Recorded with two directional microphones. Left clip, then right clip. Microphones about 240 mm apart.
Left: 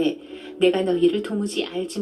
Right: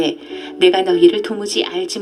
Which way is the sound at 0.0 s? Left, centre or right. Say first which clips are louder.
Right 5 dB; right.